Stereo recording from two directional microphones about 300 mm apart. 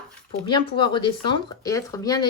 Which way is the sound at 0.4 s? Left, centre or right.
Centre.